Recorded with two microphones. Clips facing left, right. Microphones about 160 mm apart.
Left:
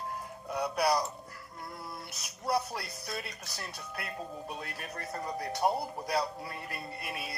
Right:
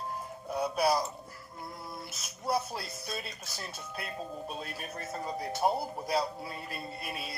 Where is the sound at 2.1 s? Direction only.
Centre (ahead or behind).